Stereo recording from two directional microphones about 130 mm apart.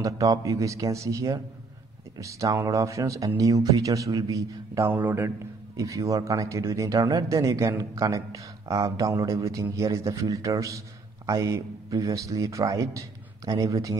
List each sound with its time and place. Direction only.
0.0 s speech: 25° right (ahead or behind)